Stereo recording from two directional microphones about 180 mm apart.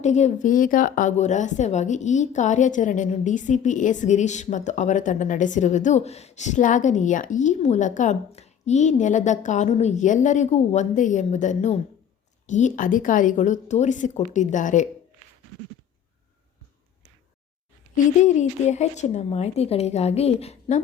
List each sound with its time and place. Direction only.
0.0 s speech: 40° left (ahead or behind)
17.9 s speech: 40° left (ahead or behind)